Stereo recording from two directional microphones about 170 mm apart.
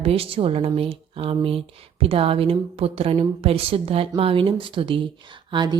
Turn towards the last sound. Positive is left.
turn(degrees=-25)  # may be behind; listen again after turning